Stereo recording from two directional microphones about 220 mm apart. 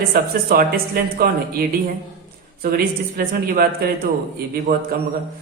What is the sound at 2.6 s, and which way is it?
A woman's voice, 40° right (ahead or behind).